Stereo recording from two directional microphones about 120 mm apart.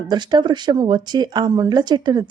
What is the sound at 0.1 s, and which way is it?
Speech, 40° right (ahead or behind).